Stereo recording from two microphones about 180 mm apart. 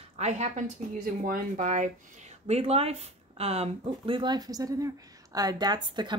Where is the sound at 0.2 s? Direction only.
40° right (ahead or behind).